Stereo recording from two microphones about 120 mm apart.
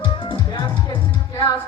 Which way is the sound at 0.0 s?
40° left (ahead or behind).